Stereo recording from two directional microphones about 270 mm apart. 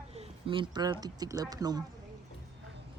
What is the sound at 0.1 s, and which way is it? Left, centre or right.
Speech, right.